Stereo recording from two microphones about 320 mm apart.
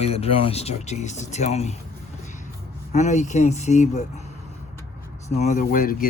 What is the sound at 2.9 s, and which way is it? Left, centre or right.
Speech, left.